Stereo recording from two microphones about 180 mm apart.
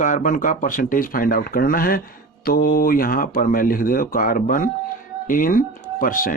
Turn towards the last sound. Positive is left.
turn(degrees=50)  # may be behind; listen again after turning